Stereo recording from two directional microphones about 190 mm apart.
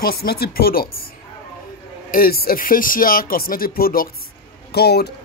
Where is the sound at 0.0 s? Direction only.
55° left (ahead or behind).